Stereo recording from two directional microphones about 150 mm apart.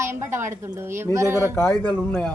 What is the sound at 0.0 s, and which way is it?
A woman's voice, 15° right (ahead or behind).